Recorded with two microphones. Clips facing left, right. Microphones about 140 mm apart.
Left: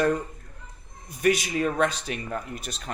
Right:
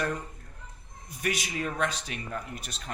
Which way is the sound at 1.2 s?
50° left (ahead or behind).